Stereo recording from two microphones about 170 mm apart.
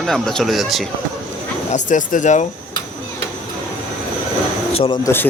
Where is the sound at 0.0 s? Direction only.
5° left (ahead or behind).